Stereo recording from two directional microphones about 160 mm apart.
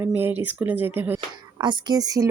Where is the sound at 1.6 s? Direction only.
25° right (ahead or behind).